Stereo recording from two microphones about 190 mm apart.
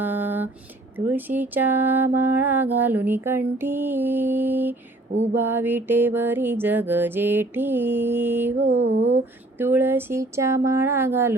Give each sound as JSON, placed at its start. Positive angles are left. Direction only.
{"t": 0.0, "sound": "a sound", "side_deg": -10}
{"t": 0.9, "sound": "mantra", "side_deg": -10}
{"t": 9.6, "sound": "mantra", "side_deg": -10}